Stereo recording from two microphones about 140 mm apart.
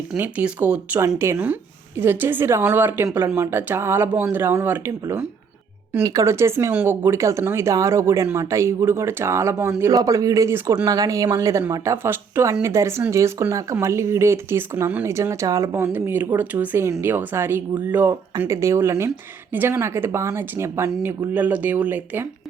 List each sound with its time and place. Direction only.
0.2 s a woman's voice: 10° right (ahead or behind)